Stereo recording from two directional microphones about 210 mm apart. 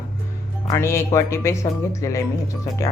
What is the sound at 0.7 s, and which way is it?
A man's voice, 15° left (ahead or behind).